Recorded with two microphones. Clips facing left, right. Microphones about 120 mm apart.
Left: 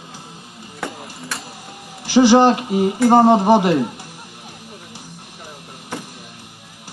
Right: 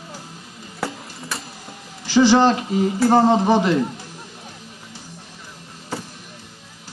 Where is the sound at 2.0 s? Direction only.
15° left (ahead or behind).